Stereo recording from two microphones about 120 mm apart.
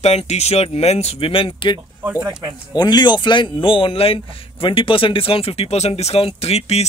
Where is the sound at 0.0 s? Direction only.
60° left (ahead or behind).